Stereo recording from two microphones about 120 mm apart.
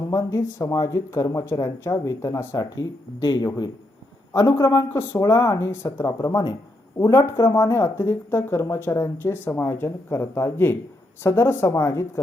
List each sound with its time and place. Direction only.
0.0 s speech: 25° left (ahead or behind)
2.6 s speech: 35° left (ahead or behind)